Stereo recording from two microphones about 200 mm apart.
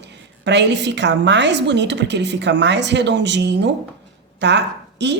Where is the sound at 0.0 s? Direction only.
60° right (ahead or behind).